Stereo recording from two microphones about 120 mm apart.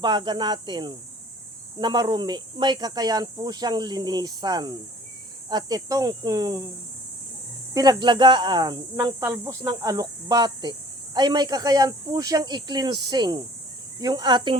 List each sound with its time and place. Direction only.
0.0 s speech: 40° right (ahead or behind)
7.7 s speech: 35° right (ahead or behind)